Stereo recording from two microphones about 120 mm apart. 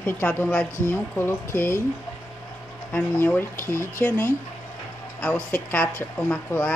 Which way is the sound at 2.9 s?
15° left (ahead or behind).